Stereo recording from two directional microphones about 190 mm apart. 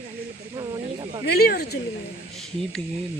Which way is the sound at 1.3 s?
55° left (ahead or behind).